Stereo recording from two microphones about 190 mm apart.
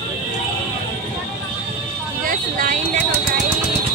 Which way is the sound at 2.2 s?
45° right (ahead or behind).